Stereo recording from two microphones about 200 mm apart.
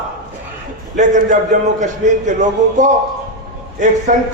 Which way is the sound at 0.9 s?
40° right (ahead or behind).